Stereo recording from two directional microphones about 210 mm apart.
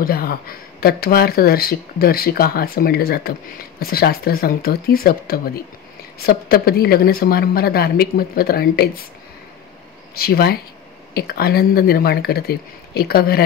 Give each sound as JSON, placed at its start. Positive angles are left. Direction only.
{"t": 0.0, "sound": "speech", "side_deg": 45}
{"t": 10.1, "sound": "speech", "side_deg": 45}